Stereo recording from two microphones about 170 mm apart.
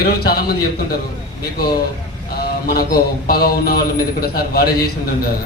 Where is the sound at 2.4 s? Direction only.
65° left (ahead or behind).